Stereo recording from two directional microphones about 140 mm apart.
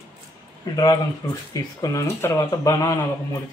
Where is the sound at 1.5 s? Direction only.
25° left (ahead or behind).